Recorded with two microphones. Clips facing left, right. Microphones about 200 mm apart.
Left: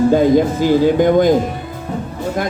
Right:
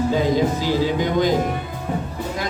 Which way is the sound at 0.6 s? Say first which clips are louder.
Left 8 dB; 50° left (ahead or behind).